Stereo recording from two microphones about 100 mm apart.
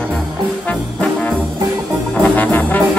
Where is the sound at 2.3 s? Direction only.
15° left (ahead or behind).